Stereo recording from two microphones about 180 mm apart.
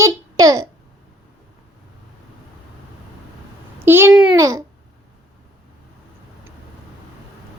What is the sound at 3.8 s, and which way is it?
Speech, 10° right (ahead or behind).